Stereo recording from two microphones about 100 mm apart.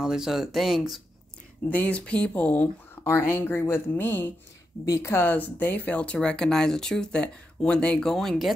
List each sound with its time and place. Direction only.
0.0 s speech: 5° right (ahead or behind)
1.7 s speech: 15° left (ahead or behind)
4.8 s speech: 30° left (ahead or behind); by 8.5 s centre (ahead or behind)